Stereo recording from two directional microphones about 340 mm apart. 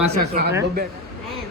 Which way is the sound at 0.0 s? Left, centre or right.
Centre.